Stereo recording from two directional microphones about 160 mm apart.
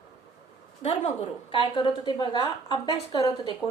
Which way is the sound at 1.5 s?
30° left (ahead or behind).